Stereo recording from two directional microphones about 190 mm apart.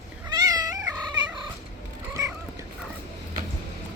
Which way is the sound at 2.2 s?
20° right (ahead or behind).